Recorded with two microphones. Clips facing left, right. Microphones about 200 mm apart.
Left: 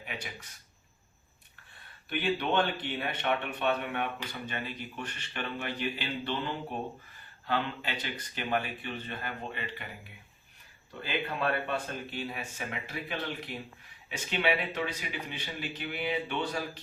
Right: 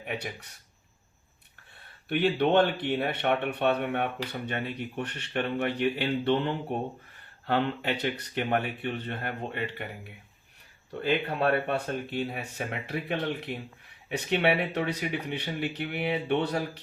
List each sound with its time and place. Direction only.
0.0 s speech: 65° right (ahead or behind)
2.0 s speech: 60° right (ahead or behind)
11.0 s speech: 60° right (ahead or behind)